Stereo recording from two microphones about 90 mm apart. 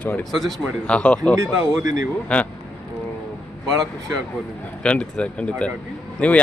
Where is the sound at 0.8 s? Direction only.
15° left (ahead or behind).